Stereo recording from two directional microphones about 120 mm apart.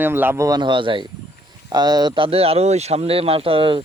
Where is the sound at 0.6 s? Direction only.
40° right (ahead or behind).